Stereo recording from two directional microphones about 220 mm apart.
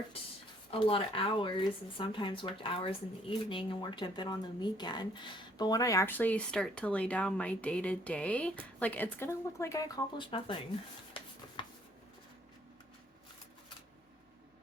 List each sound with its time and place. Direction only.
0.7 s speech: 25° left (ahead or behind)